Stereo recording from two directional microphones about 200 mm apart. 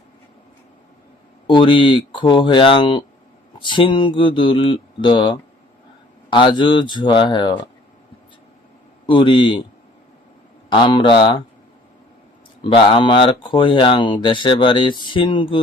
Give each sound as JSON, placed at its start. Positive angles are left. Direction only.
{"t": 1.5, "sound": "speech", "side_deg": 25}
{"t": 9.0, "sound": "speech", "side_deg": 25}
{"t": 10.7, "sound": "speech", "side_deg": 25}
{"t": 12.6, "sound": "speech", "side_deg": 25}